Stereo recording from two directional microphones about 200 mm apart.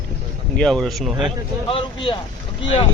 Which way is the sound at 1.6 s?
25° left (ahead or behind).